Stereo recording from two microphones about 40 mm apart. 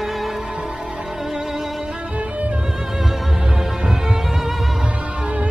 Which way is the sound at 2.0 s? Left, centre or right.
Right.